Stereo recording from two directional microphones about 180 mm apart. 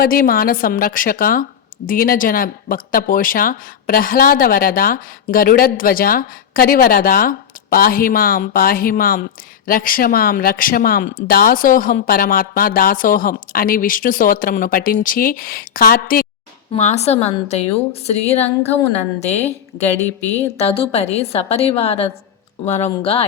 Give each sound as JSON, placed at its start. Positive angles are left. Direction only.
{"t": 0.0, "sound": "speech", "side_deg": 55}
{"t": 16.7, "sound": "a woman's voice", "side_deg": 40}
{"t": 20.6, "sound": "a woman's voice", "side_deg": 30}